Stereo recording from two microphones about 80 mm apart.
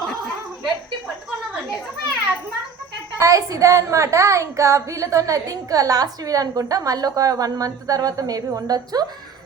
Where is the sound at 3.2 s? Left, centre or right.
Right.